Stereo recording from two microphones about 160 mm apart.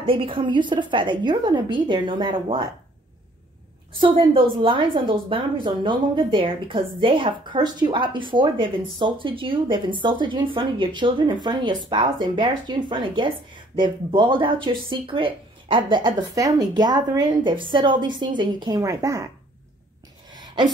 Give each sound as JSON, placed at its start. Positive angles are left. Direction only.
{"t": 0.0, "sound": "a woman's voice", "side_deg": -35}
{"t": 4.0, "sound": "a woman's voice", "side_deg": -35}
{"t": 20.3, "sound": "a sound", "side_deg": -25}